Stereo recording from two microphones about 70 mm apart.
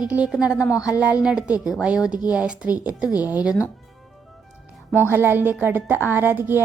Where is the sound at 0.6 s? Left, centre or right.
Left.